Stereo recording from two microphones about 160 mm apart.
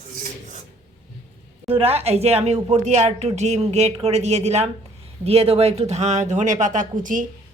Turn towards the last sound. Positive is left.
turn(degrees=-55)  # may be behind; listen again after turning